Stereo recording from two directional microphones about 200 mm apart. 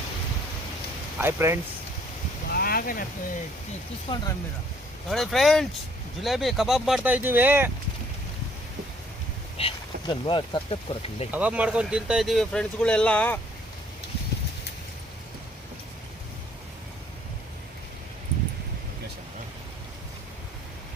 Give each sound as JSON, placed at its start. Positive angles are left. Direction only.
{"t": 1.2, "sound": "speech", "side_deg": -15}
{"t": 2.5, "sound": "boat", "side_deg": 50}
{"t": 4.1, "sound": "speech", "side_deg": 20}
{"t": 5.0, "sound": "speech", "side_deg": 0}
{"t": 9.6, "sound": "speech", "side_deg": 25}
{"t": 11.3, "sound": "speech", "side_deg": -5}